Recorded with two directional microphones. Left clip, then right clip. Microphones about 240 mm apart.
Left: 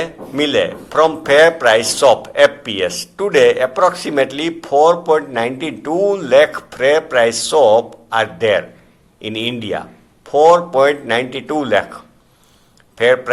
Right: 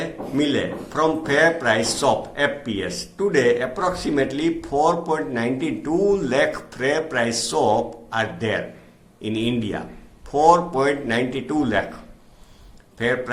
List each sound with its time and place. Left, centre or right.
0.0 s a man's voice: left
13.0 s a man's voice: left